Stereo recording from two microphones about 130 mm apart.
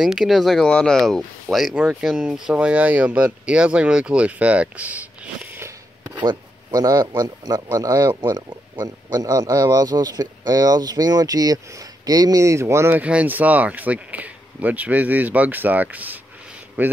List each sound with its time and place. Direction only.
0.0 s speech: 5° right (ahead or behind)
6.1 s speech: 30° right (ahead or behind)
12.9 s speech: 10° right (ahead or behind)